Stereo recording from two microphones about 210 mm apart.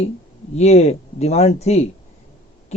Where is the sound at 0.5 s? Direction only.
30° left (ahead or behind).